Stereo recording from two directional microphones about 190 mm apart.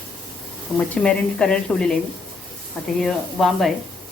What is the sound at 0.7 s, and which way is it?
Speech, 5° left (ahead or behind).